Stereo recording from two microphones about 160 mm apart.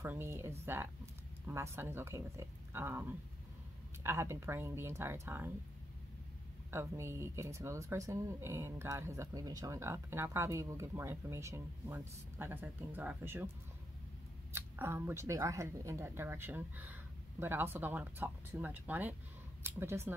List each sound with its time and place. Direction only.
0.0 s speech: 15° right (ahead or behind)
6.7 s speech: 15° right (ahead or behind)
14.5 s speech: 15° right (ahead or behind)